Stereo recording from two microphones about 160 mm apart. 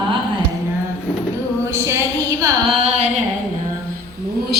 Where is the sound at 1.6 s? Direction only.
15° right (ahead or behind).